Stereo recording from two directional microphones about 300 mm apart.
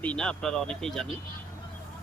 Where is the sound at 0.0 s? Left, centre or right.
Centre.